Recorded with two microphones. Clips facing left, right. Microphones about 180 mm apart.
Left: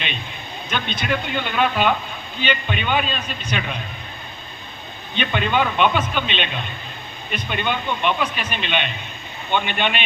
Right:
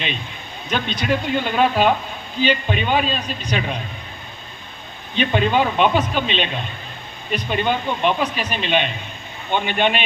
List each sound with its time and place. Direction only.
0.7 s a man's voice: 40° right (ahead or behind)
5.1 s a man's voice: 35° right (ahead or behind)